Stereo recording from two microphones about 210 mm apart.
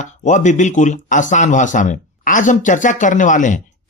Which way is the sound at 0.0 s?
35° left (ahead or behind).